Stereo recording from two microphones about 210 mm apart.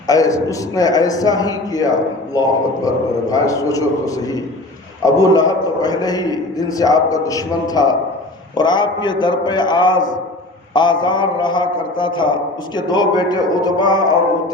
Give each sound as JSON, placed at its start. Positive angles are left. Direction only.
{"t": 0.1, "sound": "a man's voice", "side_deg": 15}